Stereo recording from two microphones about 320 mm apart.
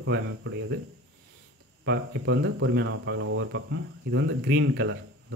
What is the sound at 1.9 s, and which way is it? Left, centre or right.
Speech, right.